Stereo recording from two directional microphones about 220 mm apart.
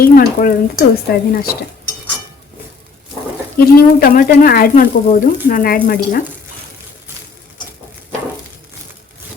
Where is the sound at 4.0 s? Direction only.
40° left (ahead or behind).